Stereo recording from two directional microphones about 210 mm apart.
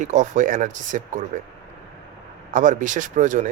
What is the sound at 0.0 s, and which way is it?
Speech, 35° right (ahead or behind).